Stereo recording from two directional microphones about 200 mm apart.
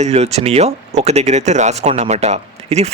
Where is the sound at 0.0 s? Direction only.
35° right (ahead or behind).